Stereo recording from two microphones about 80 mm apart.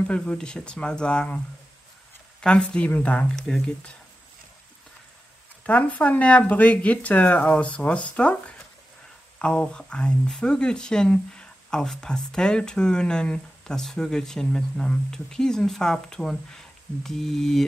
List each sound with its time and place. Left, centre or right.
0.0 s speech: centre
2.4 s speech: centre
5.7 s speech: centre